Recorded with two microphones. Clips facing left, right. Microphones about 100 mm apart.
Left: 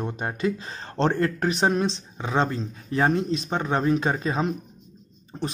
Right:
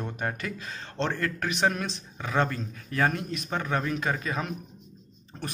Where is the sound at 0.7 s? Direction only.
35° left (ahead or behind).